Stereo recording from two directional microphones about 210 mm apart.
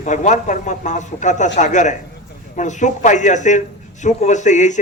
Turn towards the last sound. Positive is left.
turn(degrees=35)  # may be behind; listen again after turning